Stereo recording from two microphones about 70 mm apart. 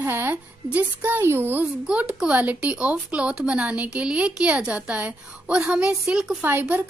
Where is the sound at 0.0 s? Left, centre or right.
Right.